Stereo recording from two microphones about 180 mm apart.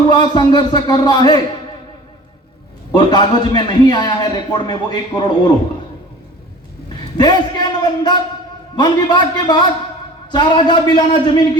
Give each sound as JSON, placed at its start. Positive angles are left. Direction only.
{"t": 0.1, "sound": "a man's voice", "side_deg": 25}
{"t": 2.9, "sound": "a man's voice", "side_deg": 25}
{"t": 7.2, "sound": "a man's voice", "side_deg": 25}